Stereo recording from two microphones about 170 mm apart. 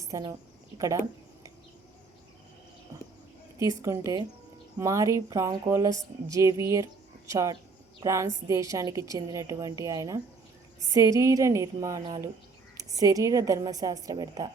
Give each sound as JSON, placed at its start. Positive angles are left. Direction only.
{"t": 0.0, "sound": "a woman's voice", "side_deg": -20}
{"t": 3.8, "sound": "a woman's voice", "side_deg": -20}